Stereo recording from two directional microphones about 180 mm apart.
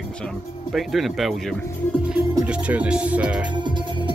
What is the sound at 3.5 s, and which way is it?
Music, 25° right (ahead or behind).